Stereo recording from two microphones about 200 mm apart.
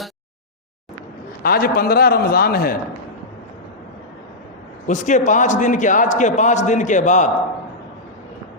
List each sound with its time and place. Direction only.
1.5 s a man's voice: 50° left (ahead or behind)
4.9 s a man's voice: 40° left (ahead or behind)